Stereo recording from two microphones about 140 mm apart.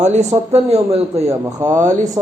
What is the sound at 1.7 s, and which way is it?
Speech, 60° right (ahead or behind).